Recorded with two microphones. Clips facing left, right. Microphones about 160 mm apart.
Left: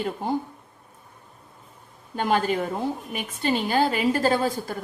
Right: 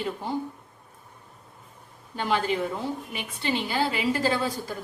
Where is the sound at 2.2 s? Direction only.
45° left (ahead or behind).